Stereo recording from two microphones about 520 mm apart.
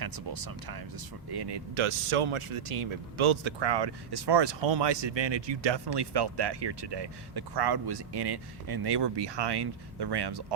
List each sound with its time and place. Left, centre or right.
0.0 s speech: right